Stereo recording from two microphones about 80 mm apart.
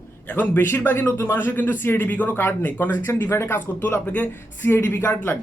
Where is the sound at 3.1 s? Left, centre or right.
Left; by 4.7 s centre.